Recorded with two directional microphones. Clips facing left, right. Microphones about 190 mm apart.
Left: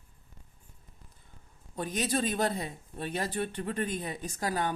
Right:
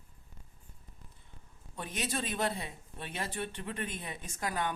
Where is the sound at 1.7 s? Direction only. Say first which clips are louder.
Left 6 dB; 40° left (ahead or behind).